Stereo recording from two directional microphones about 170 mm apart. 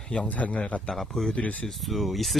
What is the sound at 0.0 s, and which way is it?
Speech, 5° left (ahead or behind).